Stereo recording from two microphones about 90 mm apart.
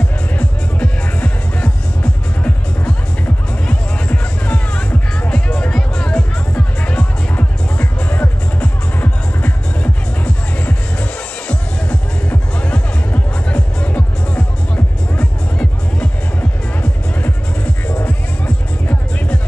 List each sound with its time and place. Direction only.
0.3 s music: 15° left (ahead or behind)
3.6 s music: 15° left (ahead or behind)
17.8 s music: 15° left (ahead or behind)